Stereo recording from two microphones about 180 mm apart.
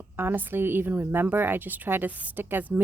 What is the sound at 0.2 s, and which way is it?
A woman's voice, 10° right (ahead or behind).